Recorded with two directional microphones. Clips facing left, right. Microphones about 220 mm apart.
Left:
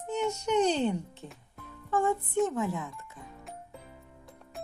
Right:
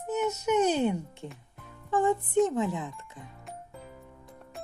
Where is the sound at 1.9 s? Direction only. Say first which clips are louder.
Right 2 dB; 20° right (ahead or behind).